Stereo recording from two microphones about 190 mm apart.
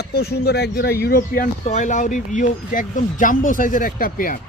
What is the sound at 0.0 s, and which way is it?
Speech, 55° left (ahead or behind).